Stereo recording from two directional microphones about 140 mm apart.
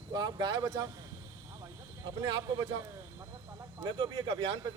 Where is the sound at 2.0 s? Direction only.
35° right (ahead or behind).